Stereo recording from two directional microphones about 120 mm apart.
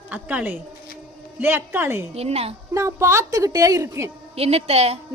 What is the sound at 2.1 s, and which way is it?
Speech, 60° right (ahead or behind).